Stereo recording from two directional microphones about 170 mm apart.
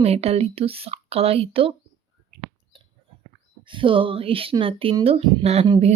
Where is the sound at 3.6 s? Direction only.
30° right (ahead or behind).